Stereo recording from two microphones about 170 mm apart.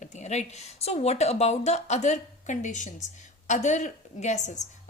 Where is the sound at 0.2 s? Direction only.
40° left (ahead or behind).